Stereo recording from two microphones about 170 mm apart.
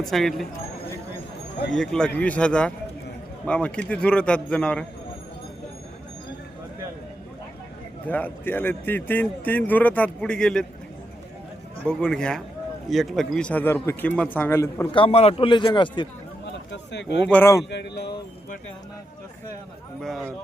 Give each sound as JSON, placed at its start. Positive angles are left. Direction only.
{"t": 0.0, "sound": "speech", "side_deg": 0}
{"t": 1.7, "sound": "a man's voice", "side_deg": 5}
{"t": 8.0, "sound": "a man's voice", "side_deg": 10}
{"t": 11.9, "sound": "a man's voice", "side_deg": 5}
{"t": 14.9, "sound": "a man's voice", "side_deg": 35}
{"t": 16.5, "sound": "speech", "side_deg": 90}
{"t": 17.2, "sound": "a man's voice", "side_deg": 10}
{"t": 17.7, "sound": "speech", "side_deg": 85}
{"t": 20.0, "sound": "speech", "side_deg": 0}